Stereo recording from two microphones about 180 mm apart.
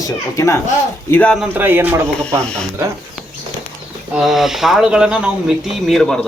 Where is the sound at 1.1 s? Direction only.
5° left (ahead or behind).